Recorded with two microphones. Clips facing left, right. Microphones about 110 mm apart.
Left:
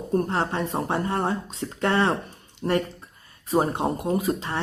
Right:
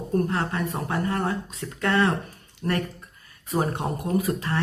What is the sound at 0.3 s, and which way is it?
Speech, 30° left (ahead or behind).